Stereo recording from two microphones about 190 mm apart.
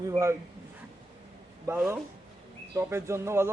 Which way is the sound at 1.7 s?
10° right (ahead or behind).